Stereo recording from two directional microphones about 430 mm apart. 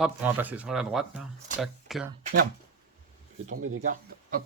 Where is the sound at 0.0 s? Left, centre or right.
Centre.